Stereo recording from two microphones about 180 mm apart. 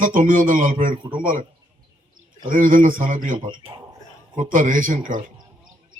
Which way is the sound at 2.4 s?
50° right (ahead or behind).